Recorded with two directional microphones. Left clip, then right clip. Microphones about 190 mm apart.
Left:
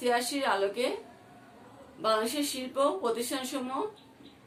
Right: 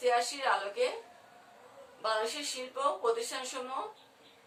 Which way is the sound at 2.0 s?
55° left (ahead or behind).